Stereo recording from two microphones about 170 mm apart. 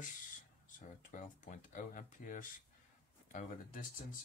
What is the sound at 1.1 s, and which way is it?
Speech, 50° left (ahead or behind).